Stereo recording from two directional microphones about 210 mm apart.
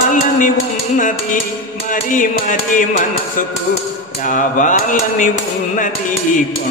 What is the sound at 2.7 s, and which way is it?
Speech, 40° left (ahead or behind).